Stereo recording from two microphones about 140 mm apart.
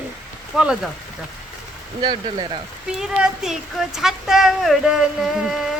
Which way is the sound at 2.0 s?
30° right (ahead or behind).